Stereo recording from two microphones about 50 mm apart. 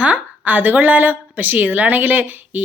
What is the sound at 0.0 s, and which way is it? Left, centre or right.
A woman's voice, right.